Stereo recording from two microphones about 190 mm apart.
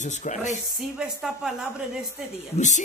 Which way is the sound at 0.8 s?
Centre (ahead or behind).